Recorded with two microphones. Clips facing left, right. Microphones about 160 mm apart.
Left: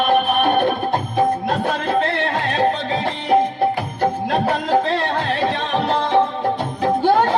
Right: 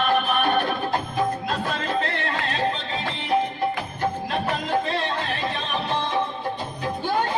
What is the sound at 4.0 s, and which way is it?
Music, 90° left.